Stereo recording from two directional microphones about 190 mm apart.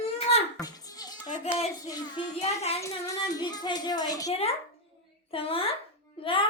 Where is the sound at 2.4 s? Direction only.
35° left (ahead or behind).